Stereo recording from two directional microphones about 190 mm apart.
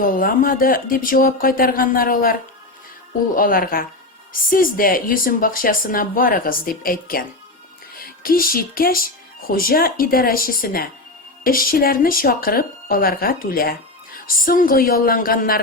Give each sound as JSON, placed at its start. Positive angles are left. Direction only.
{"t": 0.0, "sound": "speech", "side_deg": 45}
{"t": 3.3, "sound": "speech", "side_deg": 50}